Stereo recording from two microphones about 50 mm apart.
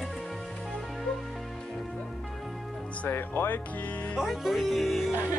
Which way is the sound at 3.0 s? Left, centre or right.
Left.